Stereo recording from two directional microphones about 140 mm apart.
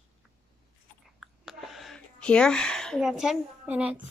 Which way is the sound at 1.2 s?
Centre (ahead or behind).